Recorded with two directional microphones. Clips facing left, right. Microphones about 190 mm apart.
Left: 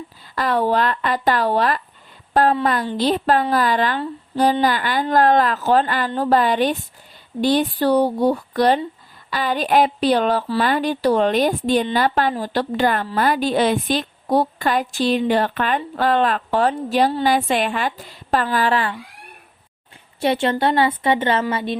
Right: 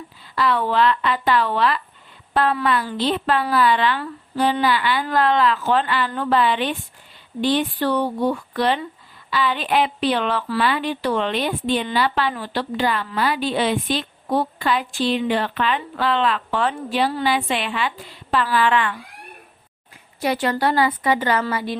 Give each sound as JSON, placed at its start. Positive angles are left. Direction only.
{"t": 0.3, "sound": "a woman's voice", "side_deg": 45}
{"t": 20.1, "sound": "a woman's voice", "side_deg": 25}